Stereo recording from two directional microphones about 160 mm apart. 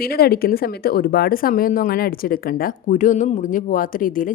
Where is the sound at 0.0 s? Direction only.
70° left (ahead or behind).